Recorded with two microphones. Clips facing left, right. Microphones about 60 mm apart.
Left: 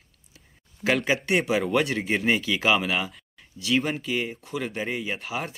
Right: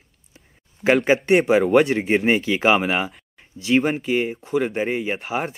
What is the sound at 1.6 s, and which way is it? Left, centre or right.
Speech, right.